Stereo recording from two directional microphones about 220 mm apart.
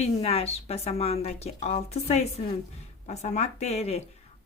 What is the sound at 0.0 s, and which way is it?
Speech, 30° left (ahead or behind).